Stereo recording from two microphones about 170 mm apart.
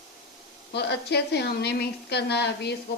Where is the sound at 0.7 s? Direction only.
75° left (ahead or behind).